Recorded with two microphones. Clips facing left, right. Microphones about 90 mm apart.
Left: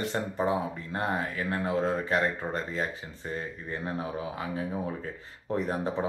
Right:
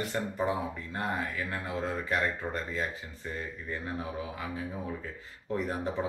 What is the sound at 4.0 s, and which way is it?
Speech, 35° left (ahead or behind).